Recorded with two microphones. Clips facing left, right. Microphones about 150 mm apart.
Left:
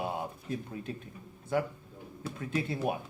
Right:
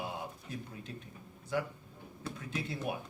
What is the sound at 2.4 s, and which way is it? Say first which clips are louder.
Speech: left 7 dB; 50° left (ahead or behind).